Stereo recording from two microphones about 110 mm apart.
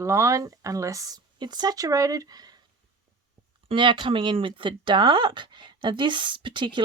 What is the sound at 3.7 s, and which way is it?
Speech, 45° right (ahead or behind).